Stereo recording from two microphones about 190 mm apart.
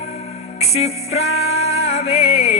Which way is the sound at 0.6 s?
35° left (ahead or behind).